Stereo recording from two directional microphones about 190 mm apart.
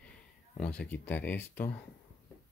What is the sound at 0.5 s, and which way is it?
Speech, 5° left (ahead or behind).